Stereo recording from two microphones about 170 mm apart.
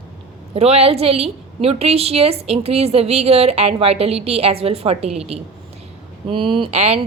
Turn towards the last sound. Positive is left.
turn(degrees=-40)  # may be behind; listen again after turning